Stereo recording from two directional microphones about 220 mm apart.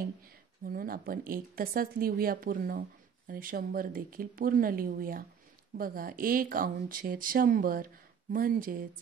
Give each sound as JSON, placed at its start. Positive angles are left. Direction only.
{"t": 0.7, "sound": "speech", "side_deg": -40}